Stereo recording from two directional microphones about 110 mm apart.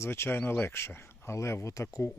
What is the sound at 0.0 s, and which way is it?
Speech, 20° left (ahead or behind).